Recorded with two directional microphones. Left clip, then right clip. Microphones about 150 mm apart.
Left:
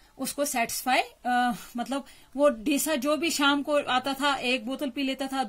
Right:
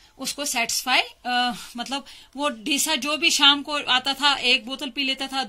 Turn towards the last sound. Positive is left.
turn(degrees=50)  # may be behind; listen again after turning